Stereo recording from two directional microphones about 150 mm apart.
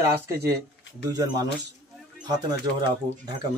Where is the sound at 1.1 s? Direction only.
25° right (ahead or behind).